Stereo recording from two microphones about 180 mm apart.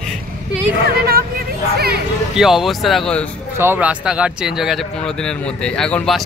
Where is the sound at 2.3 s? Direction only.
Centre (ahead or behind).